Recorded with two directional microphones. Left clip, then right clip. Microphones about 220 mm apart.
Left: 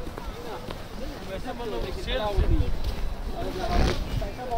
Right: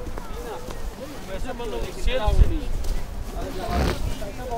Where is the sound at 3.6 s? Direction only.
10° right (ahead or behind).